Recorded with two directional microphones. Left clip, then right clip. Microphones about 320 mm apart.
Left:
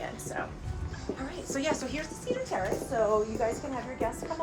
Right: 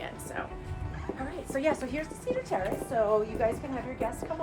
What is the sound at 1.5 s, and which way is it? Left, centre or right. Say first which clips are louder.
Speech: right 2 dB; right.